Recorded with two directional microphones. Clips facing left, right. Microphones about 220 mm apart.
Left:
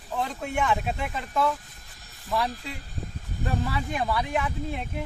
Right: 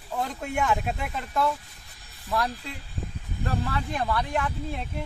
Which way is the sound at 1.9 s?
45° left (ahead or behind).